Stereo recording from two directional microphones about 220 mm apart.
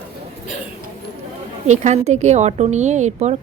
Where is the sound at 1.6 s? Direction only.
30° right (ahead or behind).